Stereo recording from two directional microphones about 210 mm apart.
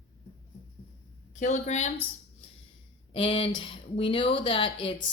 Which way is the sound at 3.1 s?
25° left (ahead or behind).